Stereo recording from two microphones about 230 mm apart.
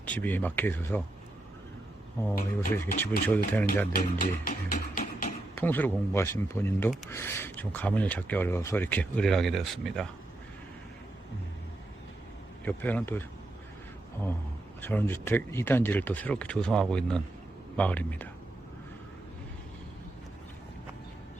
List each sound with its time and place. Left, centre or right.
0.0 s speech: centre
2.7 s speech: centre
3.9 s speech: left
5.5 s speech: centre
12.6 s speech: centre
14.8 s speech: centre